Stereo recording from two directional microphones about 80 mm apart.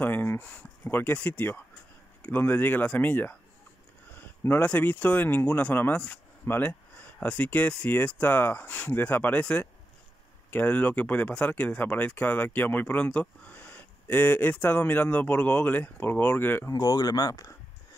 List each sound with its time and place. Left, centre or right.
0.0 s speech: left
4.6 s speech: centre
16.7 s speech: left